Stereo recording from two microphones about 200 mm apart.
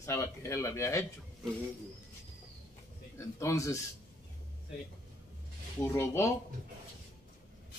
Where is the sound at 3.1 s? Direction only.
15° left (ahead or behind).